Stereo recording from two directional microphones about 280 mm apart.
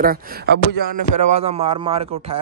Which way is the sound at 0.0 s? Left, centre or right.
Right.